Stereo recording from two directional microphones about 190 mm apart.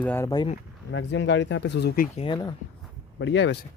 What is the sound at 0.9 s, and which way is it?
Speech, 70° left (ahead or behind).